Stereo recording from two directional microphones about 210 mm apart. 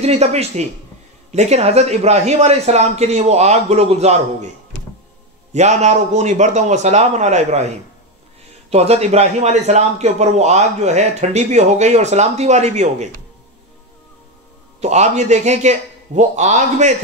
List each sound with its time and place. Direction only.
0.0 s a man's voice: 30° right (ahead or behind)
5.5 s a man's voice: 35° right (ahead or behind)
14.8 s a man's voice: 30° right (ahead or behind)